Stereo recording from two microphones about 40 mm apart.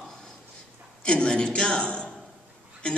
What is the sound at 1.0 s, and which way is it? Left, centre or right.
A man's voice, left.